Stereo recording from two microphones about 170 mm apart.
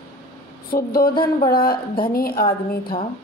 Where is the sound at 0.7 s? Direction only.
60° left (ahead or behind).